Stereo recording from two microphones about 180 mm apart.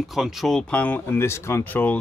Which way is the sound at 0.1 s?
Centre (ahead or behind).